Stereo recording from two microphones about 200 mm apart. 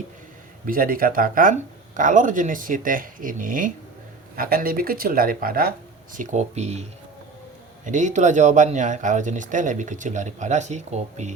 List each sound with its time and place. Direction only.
0.7 s speech: 45° right (ahead or behind)
6.1 s speech: 35° right (ahead or behind)
7.9 s speech: 40° right (ahead or behind)